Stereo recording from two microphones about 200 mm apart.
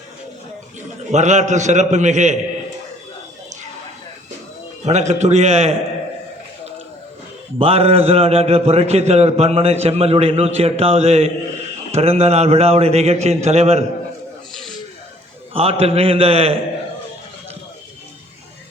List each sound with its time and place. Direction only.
0.8 s a man's voice: 35° right (ahead or behind)
4.9 s a man's voice: 35° right (ahead or behind)
7.6 s a man's voice: 30° right (ahead or behind)
15.5 s a man's voice: 30° right (ahead or behind)